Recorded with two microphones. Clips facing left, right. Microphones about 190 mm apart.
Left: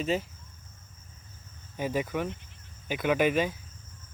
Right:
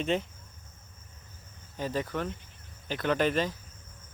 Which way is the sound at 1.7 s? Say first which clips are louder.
Left 2 dB; 10° left (ahead or behind).